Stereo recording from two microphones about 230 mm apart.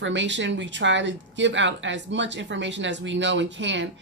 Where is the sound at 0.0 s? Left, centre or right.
Right.